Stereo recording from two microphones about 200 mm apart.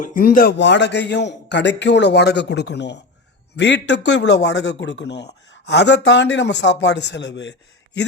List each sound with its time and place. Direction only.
0.2 s speech: 50° left (ahead or behind)